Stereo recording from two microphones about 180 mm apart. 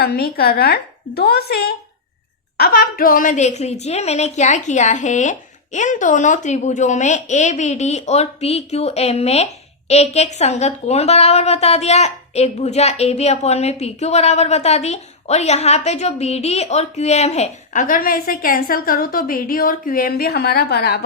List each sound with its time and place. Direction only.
0.0 s a woman's voice: 60° left (ahead or behind)